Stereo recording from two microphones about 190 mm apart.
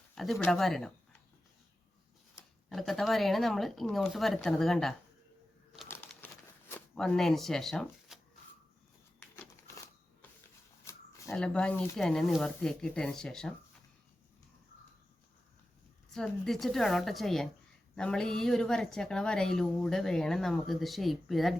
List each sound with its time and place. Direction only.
0.2 s speech: centre (ahead or behind)
2.6 s a woman's voice: centre (ahead or behind)
5.9 s shuffling cards: 10° left (ahead or behind)
9.3 s a sound: 10° left (ahead or behind)
10.8 s shuffling cards: 15° left (ahead or behind)
11.3 s a woman's voice: 5° left (ahead or behind)
16.1 s a woman's voice: centre (ahead or behind)